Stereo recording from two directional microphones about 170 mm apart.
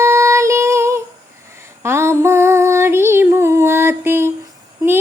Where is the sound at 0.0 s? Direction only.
15° right (ahead or behind).